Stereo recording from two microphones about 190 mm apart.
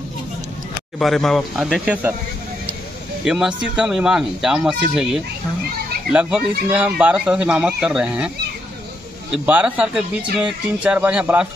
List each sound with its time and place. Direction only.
0.9 s speech: centre (ahead or behind)
3.3 s speech: 5° right (ahead or behind)
9.5 s speech: 10° right (ahead or behind)